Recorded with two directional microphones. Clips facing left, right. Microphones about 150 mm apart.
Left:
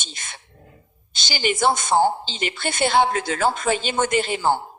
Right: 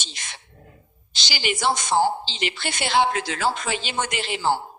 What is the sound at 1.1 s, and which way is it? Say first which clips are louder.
A woman's voice: left 4 dB; 50° left (ahead or behind).